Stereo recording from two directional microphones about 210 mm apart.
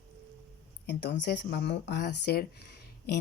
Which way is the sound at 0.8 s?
55° left (ahead or behind).